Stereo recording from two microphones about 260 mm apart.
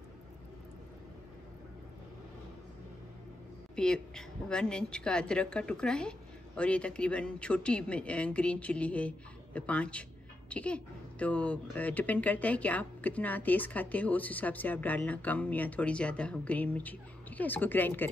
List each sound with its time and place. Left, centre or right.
3.7 s speech: centre